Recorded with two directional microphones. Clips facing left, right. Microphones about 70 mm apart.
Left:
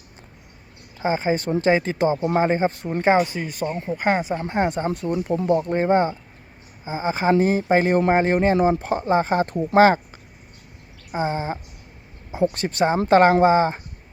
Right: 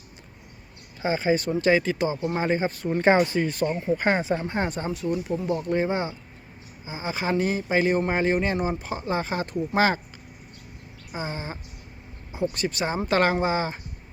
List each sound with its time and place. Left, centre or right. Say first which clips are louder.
0.9 s speech: left 2 dB; left
3.2 s speech: right 3 dB; right
4.0 s speech: left 5 dB; centre
4.9 s speech: left 3 dB; left
11.1 s speech: left 8 dB; left
12.5 s speech: left 6 dB; left